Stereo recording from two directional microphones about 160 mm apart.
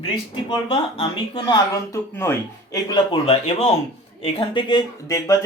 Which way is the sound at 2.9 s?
35° left (ahead or behind).